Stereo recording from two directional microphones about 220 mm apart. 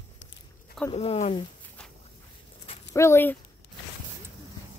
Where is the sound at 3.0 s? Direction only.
10° left (ahead or behind).